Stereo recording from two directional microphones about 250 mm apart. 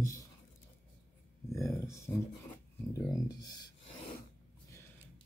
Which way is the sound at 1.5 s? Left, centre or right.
Centre.